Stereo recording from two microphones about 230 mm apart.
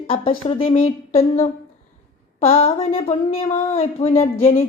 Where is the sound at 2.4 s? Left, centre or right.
Left.